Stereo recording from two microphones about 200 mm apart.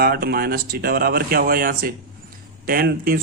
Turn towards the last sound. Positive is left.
turn(degrees=-45)  # may be behind; listen again after turning